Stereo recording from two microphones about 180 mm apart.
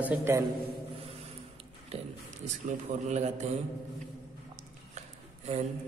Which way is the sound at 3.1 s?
40° right (ahead or behind).